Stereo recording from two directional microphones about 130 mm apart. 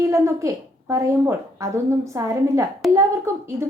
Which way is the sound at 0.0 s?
25° right (ahead or behind).